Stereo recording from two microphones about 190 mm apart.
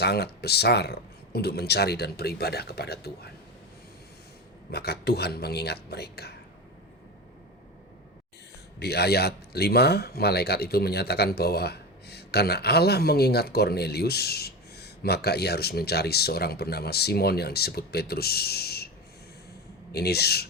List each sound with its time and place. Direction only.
0.0 s speech: 60° left (ahead or behind)
4.7 s speech: 60° left (ahead or behind)
8.8 s speech: 60° left (ahead or behind)
19.9 s speech: 55° left (ahead or behind)